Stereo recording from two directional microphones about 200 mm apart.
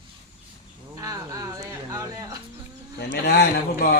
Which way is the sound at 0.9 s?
15° right (ahead or behind).